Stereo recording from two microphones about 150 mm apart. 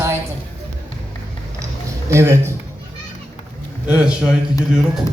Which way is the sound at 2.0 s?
20° right (ahead or behind).